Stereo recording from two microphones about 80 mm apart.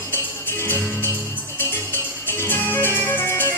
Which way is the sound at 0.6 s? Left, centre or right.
Left.